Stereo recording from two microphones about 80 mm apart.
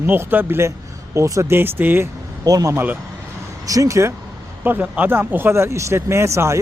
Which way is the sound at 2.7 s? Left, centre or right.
Centre.